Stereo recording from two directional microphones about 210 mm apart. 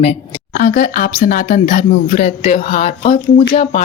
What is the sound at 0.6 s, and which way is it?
Speech, 45° left (ahead or behind).